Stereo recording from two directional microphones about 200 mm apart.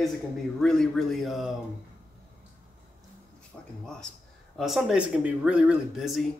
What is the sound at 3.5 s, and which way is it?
Speech, centre (ahead or behind).